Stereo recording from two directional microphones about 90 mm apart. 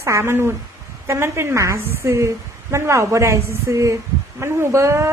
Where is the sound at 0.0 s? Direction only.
30° right (ahead or behind).